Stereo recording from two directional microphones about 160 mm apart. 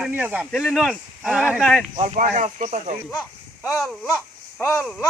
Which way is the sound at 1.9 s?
45° right (ahead or behind).